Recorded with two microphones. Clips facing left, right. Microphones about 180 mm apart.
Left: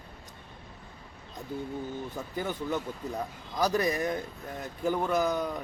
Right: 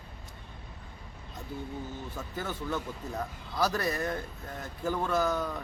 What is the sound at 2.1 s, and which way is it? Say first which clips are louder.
A man's voice: left 2 dB; 15° left (ahead or behind).